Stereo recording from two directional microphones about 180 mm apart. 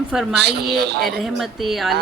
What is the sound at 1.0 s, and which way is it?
Speech, centre (ahead or behind).